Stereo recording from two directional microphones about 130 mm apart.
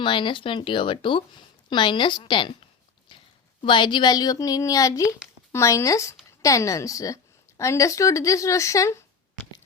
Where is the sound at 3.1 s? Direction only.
40° left (ahead or behind).